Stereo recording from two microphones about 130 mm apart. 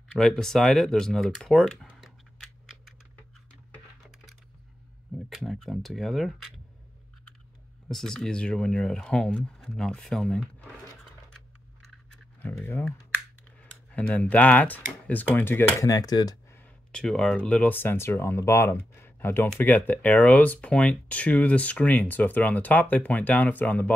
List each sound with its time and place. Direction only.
0.2 s speech: 5° left (ahead or behind)
1.9 s a sound: centre (ahead or behind)
5.1 s speech: centre (ahead or behind)
7.9 s speech: 5° left (ahead or behind)
12.4 s speech: 15° left (ahead or behind)
15.9 s speech: 30° left (ahead or behind)
16.5 s speech: 10° left (ahead or behind)